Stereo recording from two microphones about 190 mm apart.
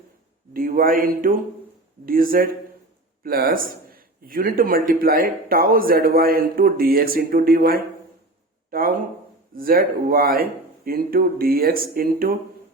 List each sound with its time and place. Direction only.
0.5 s speech: 50° right (ahead or behind)